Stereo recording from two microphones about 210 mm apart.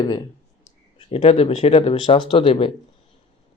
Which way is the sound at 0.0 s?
20° left (ahead or behind).